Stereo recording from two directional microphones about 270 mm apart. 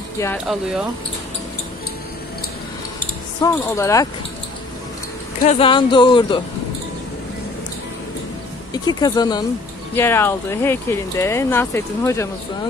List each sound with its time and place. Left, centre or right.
0.2 s speech: centre
3.3 s speech: centre
5.4 s speech: left
8.7 s speech: centre